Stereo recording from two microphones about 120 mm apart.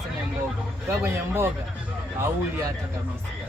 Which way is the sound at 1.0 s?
20° right (ahead or behind).